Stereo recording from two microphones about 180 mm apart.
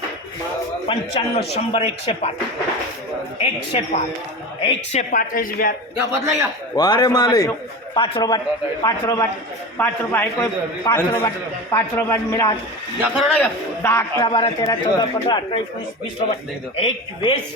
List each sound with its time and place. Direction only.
1.4 s speech: 35° left (ahead or behind)
3.4 s speech: 30° left (ahead or behind); by 5.7 s 50° left (ahead or behind)
6.1 s a man's voice: 15° right (ahead or behind)
6.7 s a man's voice: 20° left (ahead or behind)
13.0 s a man's voice: centre (ahead or behind)
13.8 s a man's voice: 15° left (ahead or behind)
14.3 s a man's voice: 30° left (ahead or behind)
16.7 s a man's voice: 30° left (ahead or behind)